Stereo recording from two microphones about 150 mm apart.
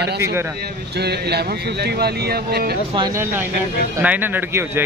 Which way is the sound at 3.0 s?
25° right (ahead or behind).